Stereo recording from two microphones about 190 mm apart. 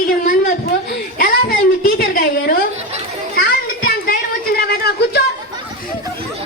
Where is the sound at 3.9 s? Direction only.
50° left (ahead or behind).